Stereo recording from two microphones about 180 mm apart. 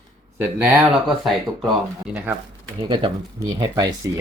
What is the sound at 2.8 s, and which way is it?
Speech, 25° right (ahead or behind).